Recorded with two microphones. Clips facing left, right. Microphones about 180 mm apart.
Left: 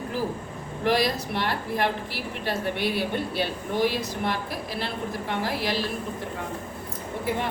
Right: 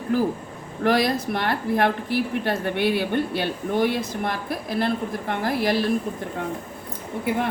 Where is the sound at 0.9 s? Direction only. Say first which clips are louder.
Right 3 dB; 55° right (ahead or behind).